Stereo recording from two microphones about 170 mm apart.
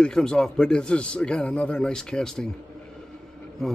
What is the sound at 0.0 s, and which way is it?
A man's voice, 5° left (ahead or behind).